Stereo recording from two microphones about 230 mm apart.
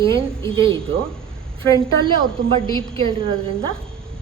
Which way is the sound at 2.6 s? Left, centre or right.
Centre.